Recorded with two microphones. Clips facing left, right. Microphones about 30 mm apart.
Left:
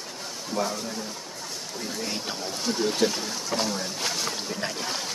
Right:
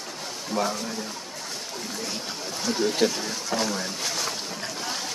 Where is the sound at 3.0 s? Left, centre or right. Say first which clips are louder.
Right 1 dB; centre.